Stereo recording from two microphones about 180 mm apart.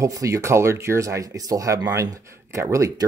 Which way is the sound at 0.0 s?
15° right (ahead or behind).